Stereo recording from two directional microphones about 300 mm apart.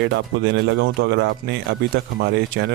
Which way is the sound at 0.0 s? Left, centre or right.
Right.